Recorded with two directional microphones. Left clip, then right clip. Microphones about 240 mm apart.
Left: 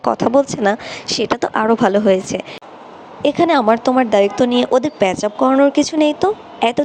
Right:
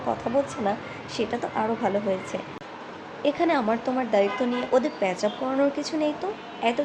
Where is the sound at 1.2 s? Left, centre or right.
Left.